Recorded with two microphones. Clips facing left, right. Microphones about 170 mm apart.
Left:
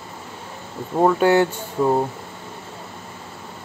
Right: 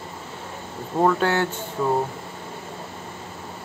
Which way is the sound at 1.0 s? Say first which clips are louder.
Left 4 dB; 15° left (ahead or behind).